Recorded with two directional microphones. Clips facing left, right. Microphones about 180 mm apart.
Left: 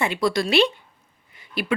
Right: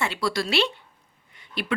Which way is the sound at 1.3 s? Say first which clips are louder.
Left 4 dB; 10° left (ahead or behind).